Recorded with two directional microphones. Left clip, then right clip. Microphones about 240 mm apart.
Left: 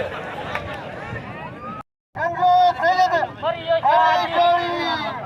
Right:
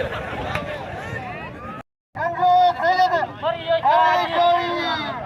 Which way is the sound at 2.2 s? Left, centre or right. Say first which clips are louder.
Even; centre.